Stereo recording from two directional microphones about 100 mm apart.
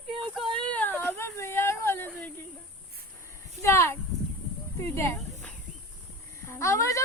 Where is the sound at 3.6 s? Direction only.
25° left (ahead or behind).